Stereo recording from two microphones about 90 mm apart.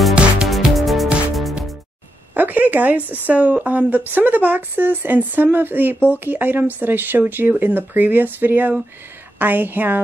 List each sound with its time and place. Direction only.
0.1 s music: 10° right (ahead or behind)
0.5 s music: centre (ahead or behind)
2.3 s a sound: 20° right (ahead or behind)
3.1 s speech: 15° right (ahead or behind)